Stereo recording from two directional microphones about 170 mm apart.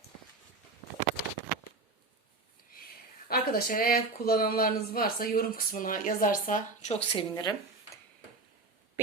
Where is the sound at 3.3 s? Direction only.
60° left (ahead or behind); by 7.2 s 40° left (ahead or behind).